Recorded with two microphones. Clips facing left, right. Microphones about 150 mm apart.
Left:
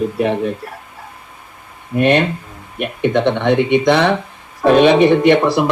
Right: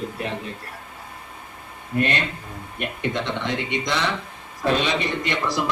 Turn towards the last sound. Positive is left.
turn(degrees=65)  # may be behind; listen again after turning